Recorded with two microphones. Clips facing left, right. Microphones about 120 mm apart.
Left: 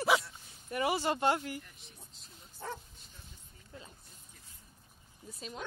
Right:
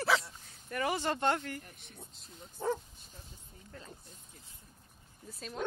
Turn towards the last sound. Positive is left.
turn(degrees=0)  # may be behind; listen again after turning